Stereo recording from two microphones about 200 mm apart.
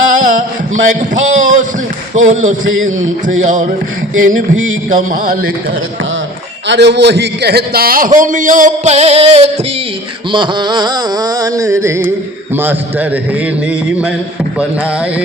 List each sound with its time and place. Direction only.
0.1 s a sound: 40° right (ahead or behind)
4.2 s a man's voice: 40° right (ahead or behind)
6.7 s a man's voice: 60° right (ahead or behind); by 9.4 s 30° right (ahead or behind)
10.3 s music: 25° right (ahead or behind)